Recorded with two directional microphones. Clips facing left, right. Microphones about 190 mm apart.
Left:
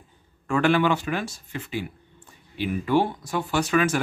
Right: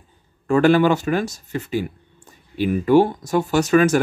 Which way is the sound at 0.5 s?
40° right (ahead or behind).